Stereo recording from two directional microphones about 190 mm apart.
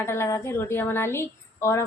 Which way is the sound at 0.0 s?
15° left (ahead or behind).